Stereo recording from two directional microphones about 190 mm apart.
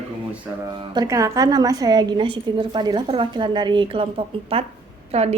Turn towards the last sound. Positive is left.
turn(degrees=-35)  # may be behind; listen again after turning